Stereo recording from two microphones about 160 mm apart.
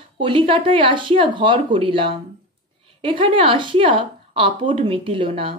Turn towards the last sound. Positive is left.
turn(degrees=-35)  # may be behind; listen again after turning